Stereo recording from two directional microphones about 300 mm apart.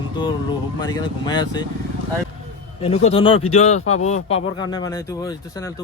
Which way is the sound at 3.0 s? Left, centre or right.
Centre.